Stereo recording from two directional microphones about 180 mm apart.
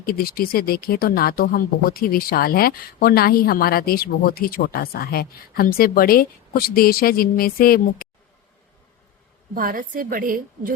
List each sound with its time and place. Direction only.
0.0 s speech: 55° left (ahead or behind)
9.6 s a woman's voice: 50° right (ahead or behind)